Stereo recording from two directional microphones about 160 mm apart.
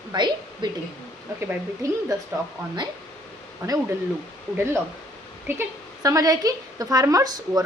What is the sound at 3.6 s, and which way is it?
Speech, 20° right (ahead or behind).